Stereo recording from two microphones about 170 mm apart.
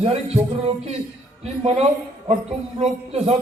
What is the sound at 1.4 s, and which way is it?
A man's voice, 35° right (ahead or behind).